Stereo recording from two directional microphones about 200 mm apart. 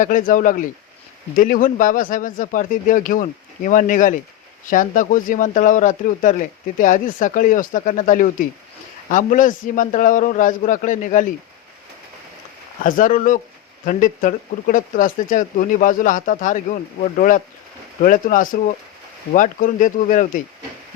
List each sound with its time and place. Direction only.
0.0 s speech: 40° left (ahead or behind)
12.8 s speech: 40° left (ahead or behind)